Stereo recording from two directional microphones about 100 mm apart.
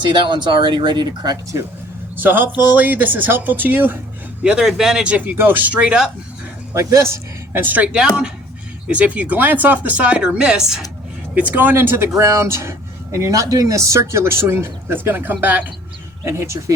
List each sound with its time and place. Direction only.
0.0 s speech: 50° right (ahead or behind)
2.1 s speech: 20° right (ahead or behind)
4.4 s speech: 5° right (ahead or behind)
6.7 s speech: 30° right (ahead or behind)